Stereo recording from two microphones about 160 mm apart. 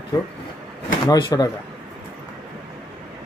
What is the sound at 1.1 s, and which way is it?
Speech, 25° left (ahead or behind).